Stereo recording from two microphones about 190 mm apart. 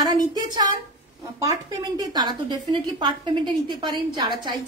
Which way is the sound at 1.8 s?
20° right (ahead or behind).